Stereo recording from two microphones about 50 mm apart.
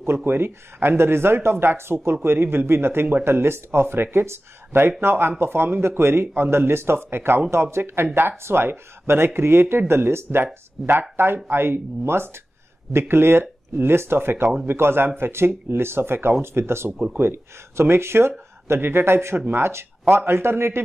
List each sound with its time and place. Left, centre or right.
0.0 s speech: right
16.9 s speech: right
17.2 s speech: right